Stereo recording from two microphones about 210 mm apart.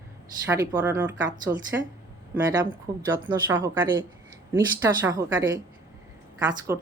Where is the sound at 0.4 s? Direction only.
15° right (ahead or behind).